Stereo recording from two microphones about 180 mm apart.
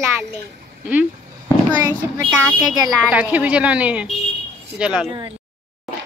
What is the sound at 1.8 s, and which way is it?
A woman's voice, 15° right (ahead or behind).